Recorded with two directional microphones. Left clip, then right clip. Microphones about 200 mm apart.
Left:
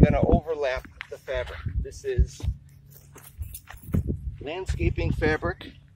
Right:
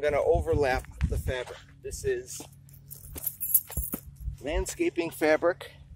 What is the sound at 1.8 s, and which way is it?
Speech, 30° right (ahead or behind).